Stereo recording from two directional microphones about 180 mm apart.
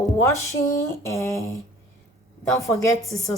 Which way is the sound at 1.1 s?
15° left (ahead or behind).